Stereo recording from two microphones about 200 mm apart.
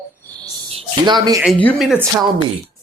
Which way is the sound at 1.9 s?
10° right (ahead or behind).